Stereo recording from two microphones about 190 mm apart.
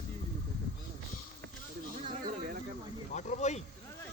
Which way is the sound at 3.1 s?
40° left (ahead or behind).